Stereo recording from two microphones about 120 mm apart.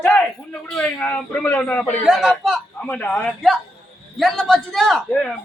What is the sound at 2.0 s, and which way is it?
Speech, centre (ahead or behind).